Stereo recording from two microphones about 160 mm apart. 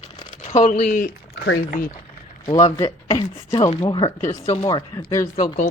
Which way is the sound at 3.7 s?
30° left (ahead or behind).